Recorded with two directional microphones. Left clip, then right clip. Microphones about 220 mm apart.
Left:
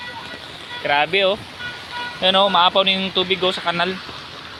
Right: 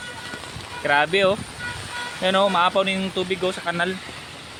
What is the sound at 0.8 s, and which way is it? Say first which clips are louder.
Speech: left 1 dB; 20° right (ahead or behind).